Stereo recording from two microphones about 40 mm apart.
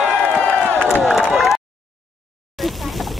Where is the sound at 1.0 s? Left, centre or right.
Centre.